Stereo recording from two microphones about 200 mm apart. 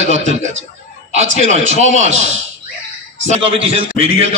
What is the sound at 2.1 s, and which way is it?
Speech, 70° right (ahead or behind).